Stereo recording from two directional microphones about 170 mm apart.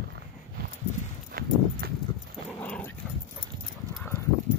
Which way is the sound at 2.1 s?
30° left (ahead or behind).